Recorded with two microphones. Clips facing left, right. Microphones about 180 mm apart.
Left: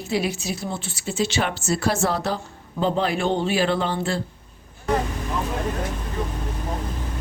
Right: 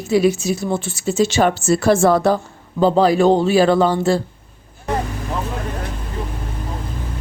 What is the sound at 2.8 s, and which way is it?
A man's voice, 35° right (ahead or behind).